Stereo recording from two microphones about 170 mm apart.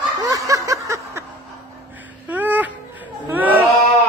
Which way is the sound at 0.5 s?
20° right (ahead or behind).